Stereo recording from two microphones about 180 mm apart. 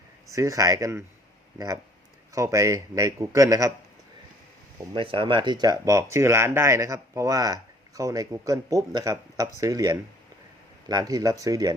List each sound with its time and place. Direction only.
0.3 s a man's voice: 20° right (ahead or behind)
4.9 s speech: 30° right (ahead or behind)